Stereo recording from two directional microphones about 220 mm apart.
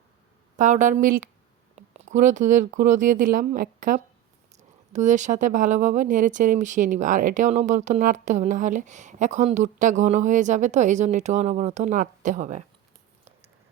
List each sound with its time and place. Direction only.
0.5 s speech: 35° right (ahead or behind)